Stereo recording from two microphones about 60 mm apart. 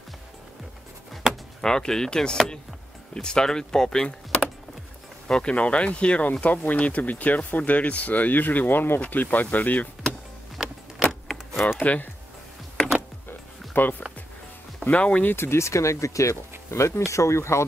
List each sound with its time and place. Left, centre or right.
1.6 s speech: centre; by 9.8 s left
10.6 s a sound: centre
11.0 s a sound: centre
11.8 s speech: left
13.3 s music: left
14.9 s speech: left
15.3 s speech: left